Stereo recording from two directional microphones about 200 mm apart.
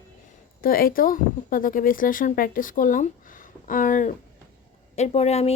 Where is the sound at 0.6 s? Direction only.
45° left (ahead or behind).